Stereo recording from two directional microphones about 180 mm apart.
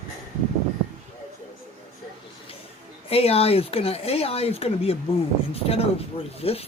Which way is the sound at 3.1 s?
35° left (ahead or behind).